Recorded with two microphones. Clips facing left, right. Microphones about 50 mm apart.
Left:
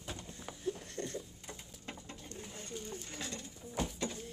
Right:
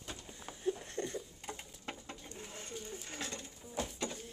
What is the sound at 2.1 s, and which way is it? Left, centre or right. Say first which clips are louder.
Bird: even; centre.